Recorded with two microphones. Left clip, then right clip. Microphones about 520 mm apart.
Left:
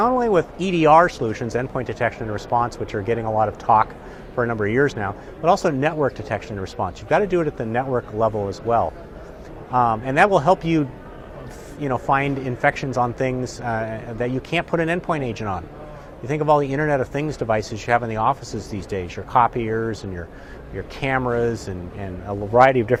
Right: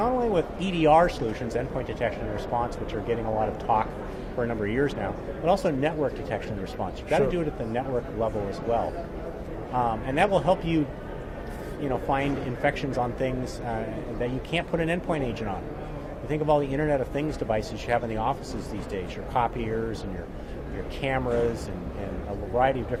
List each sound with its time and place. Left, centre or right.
0.0 s speech: left
21.0 s speech: left